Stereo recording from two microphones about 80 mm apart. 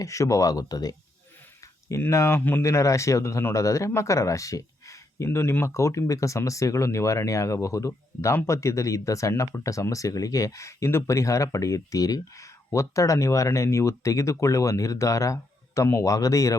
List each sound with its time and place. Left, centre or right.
0.0 s speech: left
2.0 s speech: left
2.6 s speech: left